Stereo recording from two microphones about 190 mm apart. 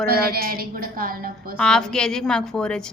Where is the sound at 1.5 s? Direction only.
5° left (ahead or behind).